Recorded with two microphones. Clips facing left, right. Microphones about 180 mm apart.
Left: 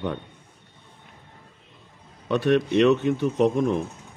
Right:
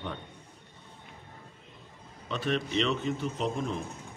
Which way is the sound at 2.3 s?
65° left (ahead or behind).